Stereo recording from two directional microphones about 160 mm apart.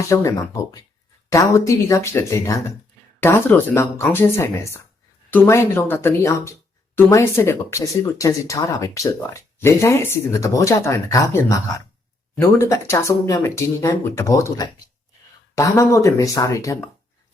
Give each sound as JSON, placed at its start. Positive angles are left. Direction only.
{"t": 0.1, "sound": "speech", "side_deg": 20}